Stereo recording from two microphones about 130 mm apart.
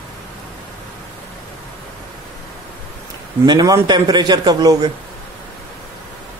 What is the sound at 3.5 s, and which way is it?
A man's voice, 30° right (ahead or behind).